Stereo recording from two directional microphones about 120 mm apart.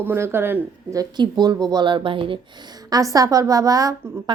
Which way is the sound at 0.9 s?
35° right (ahead or behind).